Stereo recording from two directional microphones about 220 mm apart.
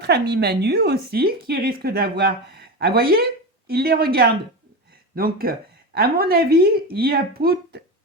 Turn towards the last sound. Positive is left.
turn(degrees=-45)  # may be behind; listen again after turning